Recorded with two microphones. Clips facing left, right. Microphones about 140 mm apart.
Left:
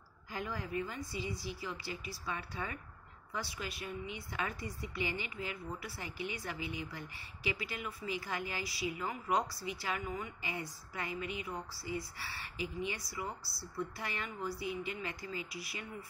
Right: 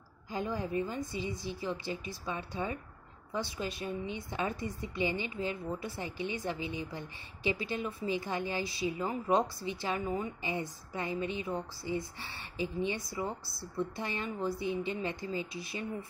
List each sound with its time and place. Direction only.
0.3 s a woman's voice: 20° right (ahead or behind)